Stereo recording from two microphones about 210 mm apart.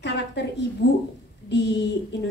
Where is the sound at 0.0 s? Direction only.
55° left (ahead or behind).